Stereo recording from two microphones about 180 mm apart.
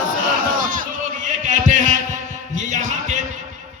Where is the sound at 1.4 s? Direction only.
45° right (ahead or behind).